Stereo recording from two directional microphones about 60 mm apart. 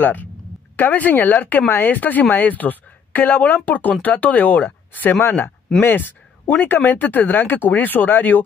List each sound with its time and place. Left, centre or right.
0.0 s a woman's voice: left